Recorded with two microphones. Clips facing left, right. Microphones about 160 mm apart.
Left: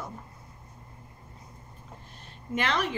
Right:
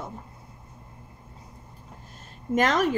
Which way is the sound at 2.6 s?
45° right (ahead or behind).